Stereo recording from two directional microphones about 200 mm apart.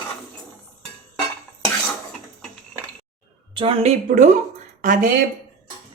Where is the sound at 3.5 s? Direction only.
30° right (ahead or behind).